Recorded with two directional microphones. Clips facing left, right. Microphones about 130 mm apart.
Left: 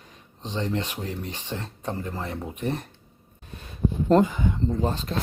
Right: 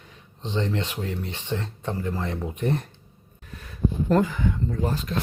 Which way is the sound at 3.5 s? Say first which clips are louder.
Even; 25° left (ahead or behind).